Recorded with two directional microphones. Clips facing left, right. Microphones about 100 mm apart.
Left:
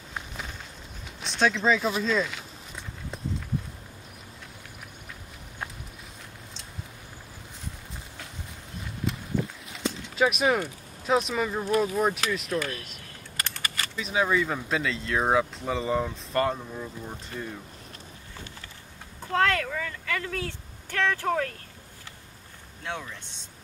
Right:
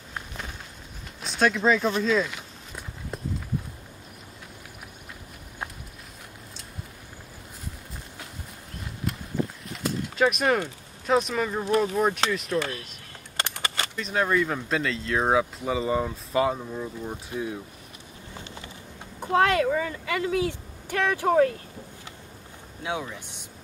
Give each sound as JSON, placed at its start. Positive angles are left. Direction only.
{"t": 1.2, "sound": "speech", "side_deg": -5}
{"t": 2.0, "sound": "walk", "side_deg": 0}
{"t": 9.7, "sound": "a sound", "side_deg": 0}
{"t": 11.1, "sound": "speech", "side_deg": 0}
{"t": 12.5, "sound": "speech", "side_deg": -30}
{"t": 13.4, "sound": "a sound", "side_deg": -25}
{"t": 13.9, "sound": "speech", "side_deg": 0}
{"t": 19.1, "sound": "speech", "side_deg": -15}
{"t": 22.8, "sound": "speech", "side_deg": -10}